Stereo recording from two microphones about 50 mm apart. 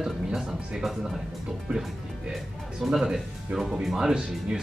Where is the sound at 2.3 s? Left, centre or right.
Centre.